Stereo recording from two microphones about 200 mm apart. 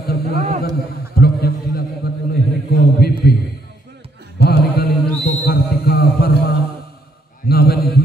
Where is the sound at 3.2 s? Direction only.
50° left (ahead or behind).